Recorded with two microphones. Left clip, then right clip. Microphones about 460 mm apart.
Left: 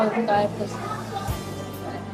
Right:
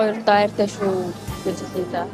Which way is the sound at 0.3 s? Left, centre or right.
Right.